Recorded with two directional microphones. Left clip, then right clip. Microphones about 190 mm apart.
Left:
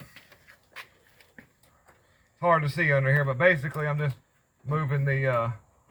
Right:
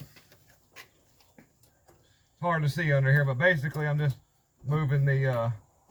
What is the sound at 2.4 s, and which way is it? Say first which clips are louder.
A man's voice: left 6 dB; 15° right (ahead or behind).